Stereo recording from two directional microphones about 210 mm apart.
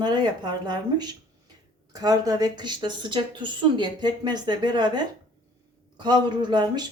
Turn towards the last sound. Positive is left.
turn(degrees=-20)  # may be behind; listen again after turning